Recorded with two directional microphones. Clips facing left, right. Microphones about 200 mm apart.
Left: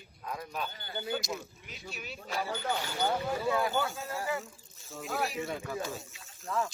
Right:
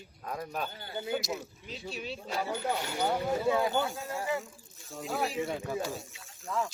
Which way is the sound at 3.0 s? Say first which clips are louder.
Right 3 dB; 15° right (ahead or behind).